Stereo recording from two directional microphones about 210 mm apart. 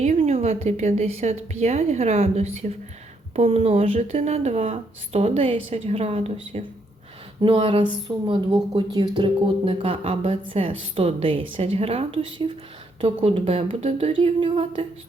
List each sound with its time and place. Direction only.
0.0 s a woman's voice: 30° right (ahead or behind)